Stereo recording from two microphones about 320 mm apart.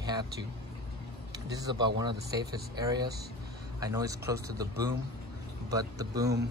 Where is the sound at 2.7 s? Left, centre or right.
Centre.